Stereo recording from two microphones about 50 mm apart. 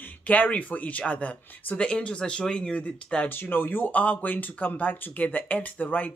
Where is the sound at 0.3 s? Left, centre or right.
Left.